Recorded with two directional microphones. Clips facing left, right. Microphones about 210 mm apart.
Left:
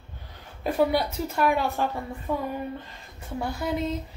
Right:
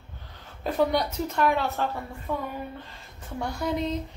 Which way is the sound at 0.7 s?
10° left (ahead or behind).